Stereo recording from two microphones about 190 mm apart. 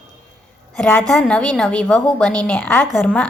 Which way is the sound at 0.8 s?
10° left (ahead or behind).